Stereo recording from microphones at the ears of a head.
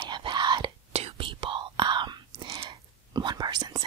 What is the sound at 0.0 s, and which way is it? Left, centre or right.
Whispering, right.